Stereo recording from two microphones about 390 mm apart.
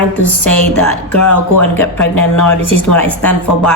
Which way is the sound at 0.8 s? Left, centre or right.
Left.